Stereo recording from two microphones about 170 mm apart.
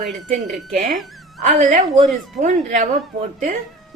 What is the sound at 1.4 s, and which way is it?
Speech, 45° right (ahead or behind).